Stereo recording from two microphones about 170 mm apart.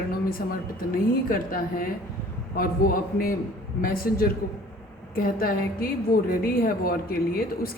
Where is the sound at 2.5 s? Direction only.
55° left (ahead or behind).